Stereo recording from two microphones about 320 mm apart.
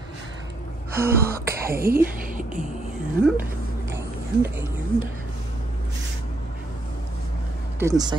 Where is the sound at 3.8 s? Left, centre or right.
Centre.